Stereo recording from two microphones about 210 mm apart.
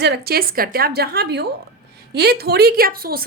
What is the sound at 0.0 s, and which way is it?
A woman's voice, 50° right (ahead or behind).